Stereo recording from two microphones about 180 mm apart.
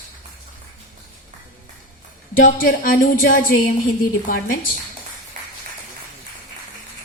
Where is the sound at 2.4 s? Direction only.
50° left (ahead or behind).